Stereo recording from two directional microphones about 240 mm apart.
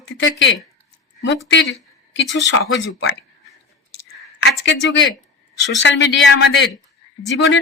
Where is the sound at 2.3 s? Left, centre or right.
Left.